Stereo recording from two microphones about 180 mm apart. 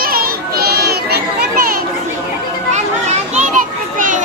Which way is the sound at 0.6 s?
60° right (ahead or behind).